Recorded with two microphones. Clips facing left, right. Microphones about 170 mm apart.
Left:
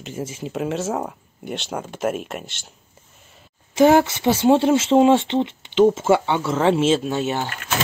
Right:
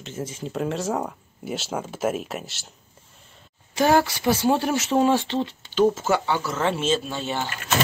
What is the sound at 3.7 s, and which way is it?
Speech, 20° left (ahead or behind).